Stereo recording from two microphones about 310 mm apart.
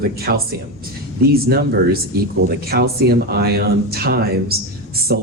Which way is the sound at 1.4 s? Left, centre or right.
Right.